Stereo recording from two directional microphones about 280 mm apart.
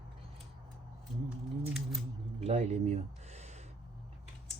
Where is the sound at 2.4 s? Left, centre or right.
Right.